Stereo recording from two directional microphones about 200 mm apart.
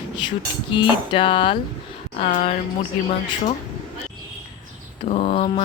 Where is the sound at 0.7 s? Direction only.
25° left (ahead or behind).